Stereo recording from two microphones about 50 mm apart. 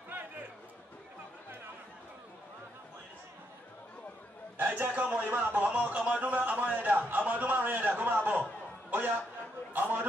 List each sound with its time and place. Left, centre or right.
4.6 s speech: right; by 6.2 s centre
6.2 s a man's voice: right